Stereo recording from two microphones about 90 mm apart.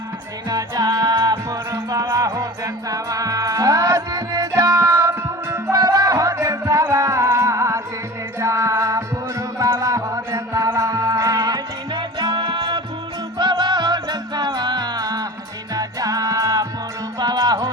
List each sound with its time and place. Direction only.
0.4 s music: 50° right (ahead or behind)
1.3 s music: 35° right (ahead or behind); by 12.8 s 60° right (ahead or behind)
13.4 s music: 50° right (ahead or behind)
17.2 s music: 50° right (ahead or behind)